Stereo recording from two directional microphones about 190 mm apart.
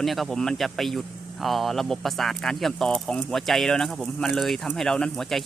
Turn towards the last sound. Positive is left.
turn(degrees=0)  # may be behind; listen again after turning